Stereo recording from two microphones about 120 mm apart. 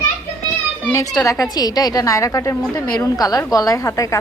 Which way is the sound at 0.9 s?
30° left (ahead or behind).